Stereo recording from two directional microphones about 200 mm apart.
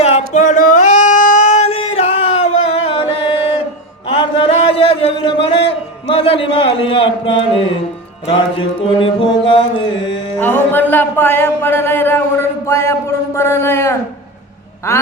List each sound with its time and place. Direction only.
0.0 s singing: 35° left (ahead or behind)
4.2 s a sound: 30° left (ahead or behind)
8.3 s mantra: 25° left (ahead or behind)
10.3 s speech: 10° left (ahead or behind)
14.9 s quack: 15° left (ahead or behind)